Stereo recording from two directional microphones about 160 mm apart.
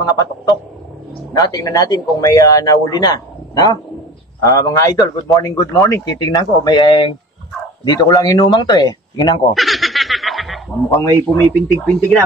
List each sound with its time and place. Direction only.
1.3 s speech: 25° left (ahead or behind)
9.5 s snicker: centre (ahead or behind)
11.2 s speech: 5° left (ahead or behind)